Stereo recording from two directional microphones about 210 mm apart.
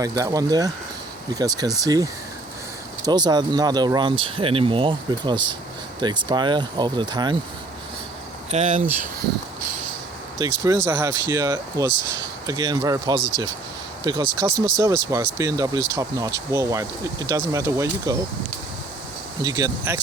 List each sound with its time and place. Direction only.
0.0 s speech: 15° right (ahead or behind)
8.5 s speech: 35° right (ahead or behind)
10.3 s speech: 15° right (ahead or behind)
19.4 s speech: 15° right (ahead or behind)